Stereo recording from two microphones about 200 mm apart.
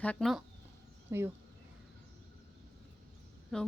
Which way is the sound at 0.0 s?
5° left (ahead or behind).